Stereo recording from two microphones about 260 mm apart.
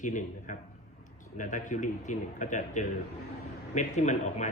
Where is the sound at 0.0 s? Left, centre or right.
Left.